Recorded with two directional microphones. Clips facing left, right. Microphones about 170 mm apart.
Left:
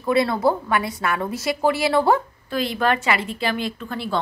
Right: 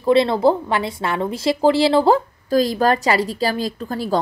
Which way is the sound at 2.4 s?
40° right (ahead or behind).